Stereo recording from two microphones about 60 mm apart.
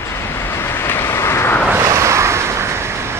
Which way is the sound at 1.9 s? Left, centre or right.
Right.